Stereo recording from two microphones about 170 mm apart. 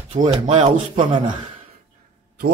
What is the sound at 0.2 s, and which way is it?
Speech, 35° right (ahead or behind).